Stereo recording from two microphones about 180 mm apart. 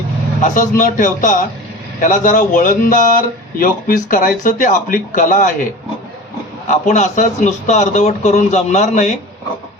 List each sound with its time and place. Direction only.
0.4 s speech: 45° left (ahead or behind)
6.7 s a man's voice: 40° left (ahead or behind)